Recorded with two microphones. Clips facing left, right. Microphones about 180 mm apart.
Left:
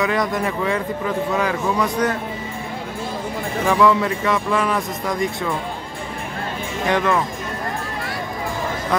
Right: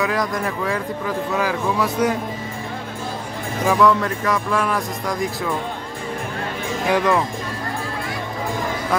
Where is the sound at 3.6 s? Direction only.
Centre (ahead or behind).